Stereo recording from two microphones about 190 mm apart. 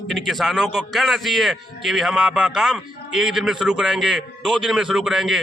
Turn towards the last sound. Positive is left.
turn(degrees=0)  # may be behind; listen again after turning